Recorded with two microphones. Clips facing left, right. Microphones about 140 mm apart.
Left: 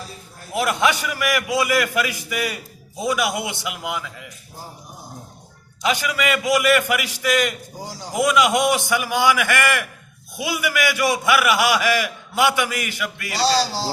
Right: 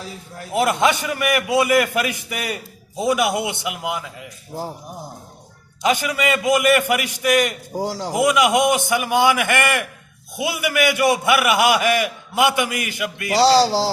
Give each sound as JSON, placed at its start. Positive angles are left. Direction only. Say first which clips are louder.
{"t": 0.5, "sound": "a man's voice", "louder": "right 2 dB", "side_deg": -20}
{"t": 5.8, "sound": "a man's voice", "louder": "right 2 dB", "side_deg": -20}
{"t": 7.8, "sound": "speech", "louder": "right 9 dB", "side_deg": -90}
{"t": 8.1, "sound": "a man's voice", "louder": "right 1 dB", "side_deg": -20}
{"t": 13.3, "sound": "speech", "louder": "right 6 dB", "side_deg": -90}